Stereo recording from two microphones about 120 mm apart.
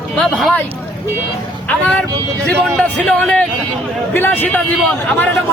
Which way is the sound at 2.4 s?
10° left (ahead or behind).